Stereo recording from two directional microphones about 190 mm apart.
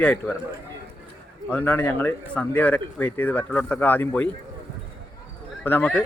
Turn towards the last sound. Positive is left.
turn(degrees=10)  # may be behind; listen again after turning